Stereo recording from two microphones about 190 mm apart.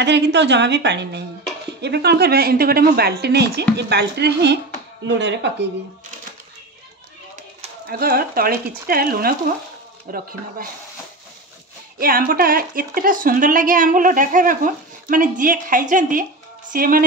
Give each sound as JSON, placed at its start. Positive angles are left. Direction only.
{"t": 0.0, "sound": "a woman's voice", "side_deg": -65}
{"t": 7.8, "sound": "speech", "side_deg": -50}
{"t": 12.0, "sound": "speech", "side_deg": -50}